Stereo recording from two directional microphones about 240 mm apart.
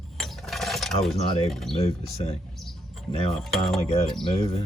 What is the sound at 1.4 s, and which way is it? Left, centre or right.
Speech, centre.